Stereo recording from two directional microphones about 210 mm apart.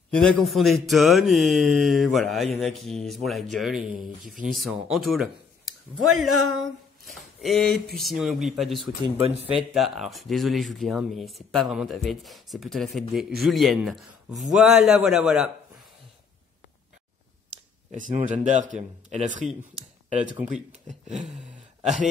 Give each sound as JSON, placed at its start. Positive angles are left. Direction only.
{"t": 0.1, "sound": "speech", "side_deg": 5}
{"t": 9.0, "sound": "speech", "side_deg": -25}
{"t": 9.8, "sound": "speech", "side_deg": 0}
{"t": 17.9, "sound": "speech", "side_deg": -35}